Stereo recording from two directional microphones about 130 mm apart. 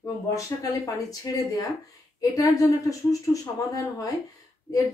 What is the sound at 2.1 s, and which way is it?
Speech, 25° left (ahead or behind).